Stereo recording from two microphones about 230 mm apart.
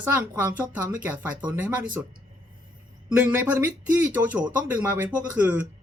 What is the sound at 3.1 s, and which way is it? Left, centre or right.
Speech, centre.